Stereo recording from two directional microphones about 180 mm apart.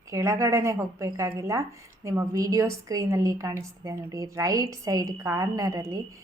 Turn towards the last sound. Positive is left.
turn(degrees=-15)  # may be behind; listen again after turning